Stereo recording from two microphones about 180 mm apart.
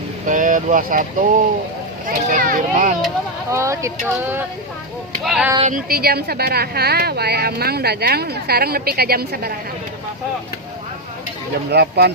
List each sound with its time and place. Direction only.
0.3 s a child's voice: 45° right (ahead or behind)
3.5 s speech: 15° right (ahead or behind)
5.2 s speech: centre (ahead or behind)
5.6 s a woman's voice: 50° right (ahead or behind)
11.7 s a woman's voice: 65° right (ahead or behind)